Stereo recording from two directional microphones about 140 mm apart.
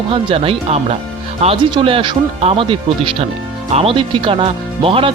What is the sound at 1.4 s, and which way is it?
Speech, 35° right (ahead or behind).